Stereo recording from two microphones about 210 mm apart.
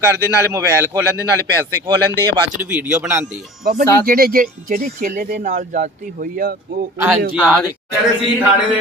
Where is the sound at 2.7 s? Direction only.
5° right (ahead or behind).